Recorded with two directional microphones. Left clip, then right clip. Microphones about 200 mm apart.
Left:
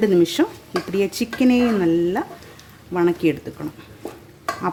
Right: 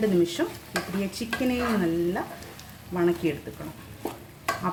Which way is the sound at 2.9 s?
45° left (ahead or behind).